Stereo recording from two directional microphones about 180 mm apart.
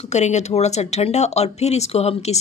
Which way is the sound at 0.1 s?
40° left (ahead or behind).